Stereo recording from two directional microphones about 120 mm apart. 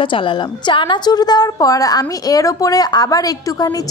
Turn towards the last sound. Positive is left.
turn(degrees=30)  # may be behind; listen again after turning